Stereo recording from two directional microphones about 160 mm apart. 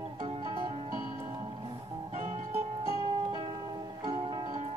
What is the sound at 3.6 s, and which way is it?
Music, 25° right (ahead or behind).